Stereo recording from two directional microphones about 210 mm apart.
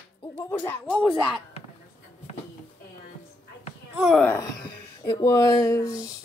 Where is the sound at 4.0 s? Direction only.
Centre (ahead or behind).